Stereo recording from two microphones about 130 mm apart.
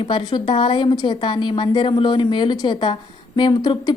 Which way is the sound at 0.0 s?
40° left (ahead or behind).